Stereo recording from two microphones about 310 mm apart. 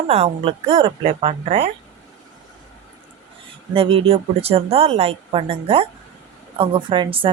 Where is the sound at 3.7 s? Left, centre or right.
Centre.